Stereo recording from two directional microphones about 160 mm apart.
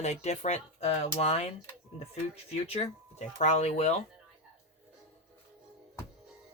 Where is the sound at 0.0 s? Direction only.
45° left (ahead or behind).